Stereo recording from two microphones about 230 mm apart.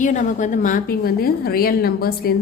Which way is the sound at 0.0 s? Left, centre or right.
Left.